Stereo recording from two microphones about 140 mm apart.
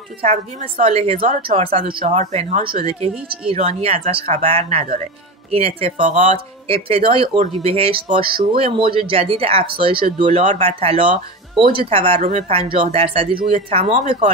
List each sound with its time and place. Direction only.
0.6 s speech: 45° right (ahead or behind)
1.8 s speech: 90° right
2.0 s speech: 55° right (ahead or behind)
2.8 s speech: 45° right (ahead or behind)
5.9 s speech: 60° right (ahead or behind); by 13.9 s 45° right (ahead or behind)